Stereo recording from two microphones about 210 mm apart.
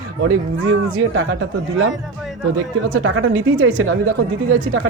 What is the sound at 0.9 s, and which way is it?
Speech, 75° right (ahead or behind).